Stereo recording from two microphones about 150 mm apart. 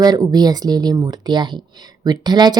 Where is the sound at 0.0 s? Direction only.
25° right (ahead or behind).